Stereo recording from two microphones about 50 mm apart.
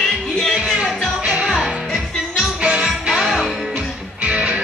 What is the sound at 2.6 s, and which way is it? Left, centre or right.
Music, centre.